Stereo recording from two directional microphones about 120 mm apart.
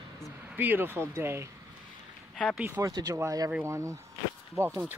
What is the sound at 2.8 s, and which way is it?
Speech, 30° right (ahead or behind).